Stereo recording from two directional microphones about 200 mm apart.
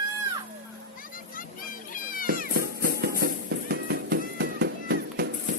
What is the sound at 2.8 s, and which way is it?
Music, 50° right (ahead or behind).